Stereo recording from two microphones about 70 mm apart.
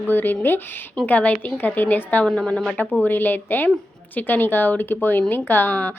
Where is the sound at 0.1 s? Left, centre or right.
Left.